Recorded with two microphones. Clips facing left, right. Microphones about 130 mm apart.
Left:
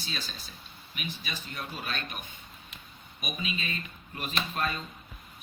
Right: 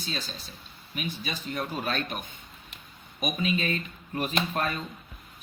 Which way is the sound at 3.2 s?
45° right (ahead or behind).